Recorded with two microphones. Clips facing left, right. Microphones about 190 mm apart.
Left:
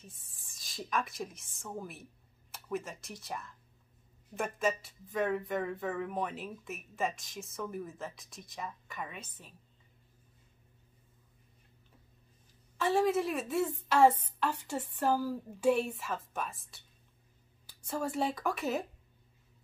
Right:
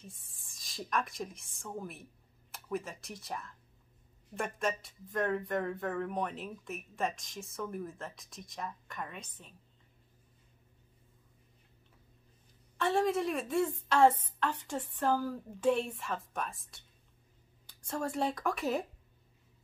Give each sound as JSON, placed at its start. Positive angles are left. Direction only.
{"t": 0.0, "sound": "speech", "side_deg": 0}
{"t": 12.7, "sound": "a woman's voice", "side_deg": 5}